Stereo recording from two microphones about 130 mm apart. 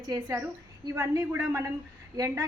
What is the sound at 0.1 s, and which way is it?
A woman's voice, 20° right (ahead or behind).